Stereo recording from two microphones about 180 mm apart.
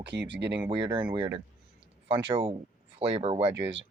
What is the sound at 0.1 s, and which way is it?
Speech, 75° right (ahead or behind).